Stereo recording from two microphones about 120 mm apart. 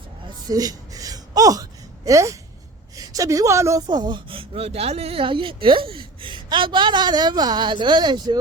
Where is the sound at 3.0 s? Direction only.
30° right (ahead or behind).